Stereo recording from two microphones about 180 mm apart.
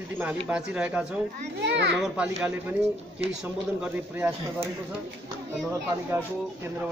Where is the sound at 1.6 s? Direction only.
75° right (ahead or behind).